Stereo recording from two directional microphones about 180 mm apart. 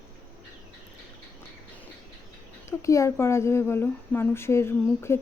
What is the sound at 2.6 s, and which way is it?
Speech, 15° left (ahead or behind).